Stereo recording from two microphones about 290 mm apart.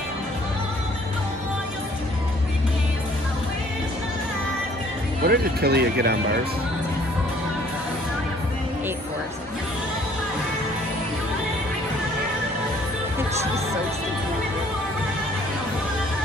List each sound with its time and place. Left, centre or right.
5.2 s speech: right